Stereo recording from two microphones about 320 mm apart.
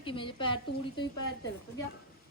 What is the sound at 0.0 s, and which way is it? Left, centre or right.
A woman's voice, centre.